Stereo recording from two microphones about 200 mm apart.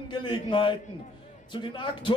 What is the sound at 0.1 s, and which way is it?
A man's voice, 25° left (ahead or behind).